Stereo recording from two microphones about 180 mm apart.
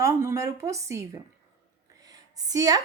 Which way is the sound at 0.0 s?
15° right (ahead or behind).